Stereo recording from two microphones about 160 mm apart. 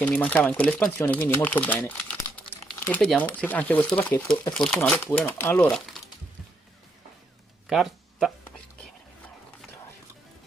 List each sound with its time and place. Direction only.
0.0 s speech: 10° left (ahead or behind)
5.7 s speech: centre (ahead or behind)
7.6 s a sound: centre (ahead or behind)